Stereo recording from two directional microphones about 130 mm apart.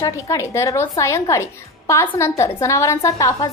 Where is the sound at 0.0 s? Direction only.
25° left (ahead or behind).